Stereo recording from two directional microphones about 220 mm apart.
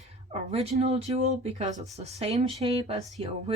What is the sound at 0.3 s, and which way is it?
Speech, 30° right (ahead or behind).